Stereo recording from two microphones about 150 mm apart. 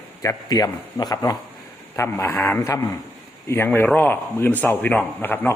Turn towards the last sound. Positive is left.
turn(degrees=15)  # may be behind; listen again after turning